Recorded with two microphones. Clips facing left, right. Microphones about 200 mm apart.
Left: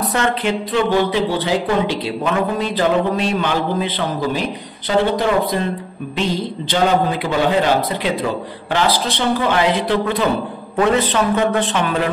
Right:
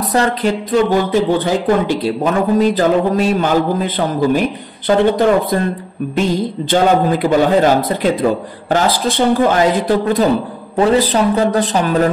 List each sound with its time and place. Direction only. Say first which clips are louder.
0.0 s speech: right 4 dB; 40° right (ahead or behind)